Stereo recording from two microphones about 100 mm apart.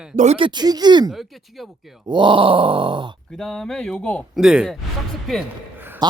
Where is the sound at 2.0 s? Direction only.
55° right (ahead or behind).